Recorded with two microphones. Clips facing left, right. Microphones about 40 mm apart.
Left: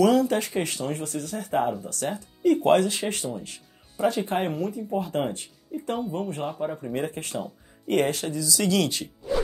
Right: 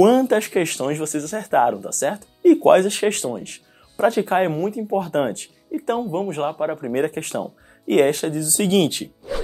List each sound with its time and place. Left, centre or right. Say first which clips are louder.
0.0 s speech: right 6 dB; right
6.6 s speech: right 7 dB; right